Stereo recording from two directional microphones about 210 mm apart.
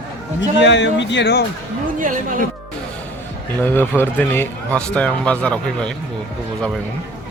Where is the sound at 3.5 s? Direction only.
10° left (ahead or behind).